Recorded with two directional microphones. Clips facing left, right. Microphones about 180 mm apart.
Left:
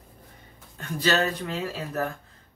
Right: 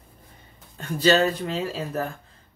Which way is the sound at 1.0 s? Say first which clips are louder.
Right 5 dB; 30° right (ahead or behind).